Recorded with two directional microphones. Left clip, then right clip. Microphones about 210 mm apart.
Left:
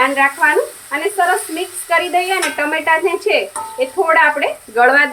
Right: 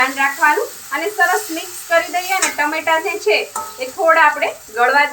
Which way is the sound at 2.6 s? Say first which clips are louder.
Left 2 dB; 45° left (ahead or behind).